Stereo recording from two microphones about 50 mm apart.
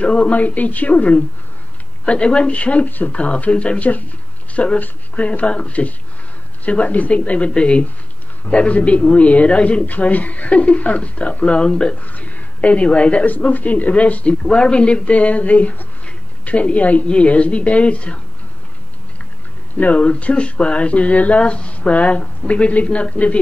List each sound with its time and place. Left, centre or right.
0.0 s a woman's voice: left
12.0 s speech: left
19.8 s speech: left